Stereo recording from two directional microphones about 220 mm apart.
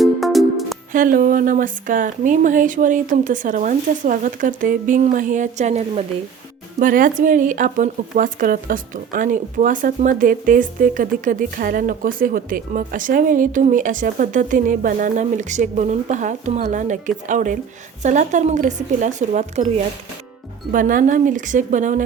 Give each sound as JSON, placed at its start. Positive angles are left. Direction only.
{"t": 0.0, "sound": "music", "side_deg": 0}
{"t": 0.9, "sound": "speech", "side_deg": -40}